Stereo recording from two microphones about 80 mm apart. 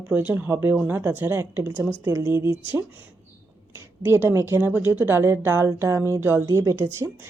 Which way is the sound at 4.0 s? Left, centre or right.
Right.